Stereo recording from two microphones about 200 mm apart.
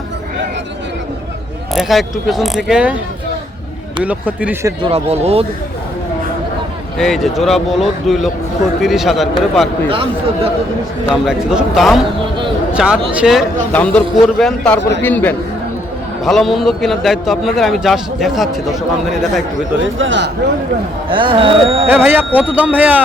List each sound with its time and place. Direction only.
1.7 s a man's voice: centre (ahead or behind)
4.0 s speech: 5° right (ahead or behind)
4.8 s speech: 30° right (ahead or behind)
7.0 s a man's voice: centre (ahead or behind)
9.9 s speech: 25° right (ahead or behind)
11.1 s a man's voice: 5° right (ahead or behind)
19.8 s a man's voice: 70° right (ahead or behind)
21.1 s speech: 25° right (ahead or behind)
21.8 s speech: 10° right (ahead or behind)